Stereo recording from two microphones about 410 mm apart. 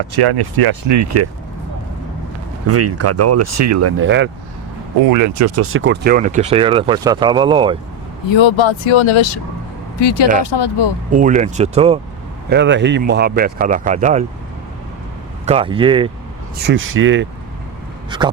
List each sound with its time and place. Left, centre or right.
0.2 s speech: right
0.9 s speech: right
2.6 s speech: right
5.0 s speech: right; by 7.8 s centre
8.3 s speech: left
10.0 s speech: left
11.1 s speech: centre
12.5 s speech: right
15.4 s speech: centre
16.6 s speech: right
18.1 s speech: centre